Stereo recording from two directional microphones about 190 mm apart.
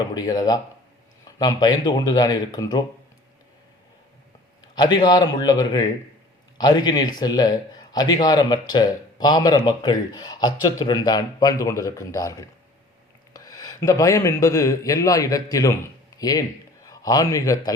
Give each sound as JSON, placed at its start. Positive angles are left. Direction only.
{"t": 0.0, "sound": "speech", "side_deg": 20}
{"t": 4.7, "sound": "a man's voice", "side_deg": 25}